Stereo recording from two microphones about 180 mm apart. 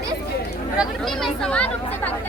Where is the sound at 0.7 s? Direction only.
Centre (ahead or behind).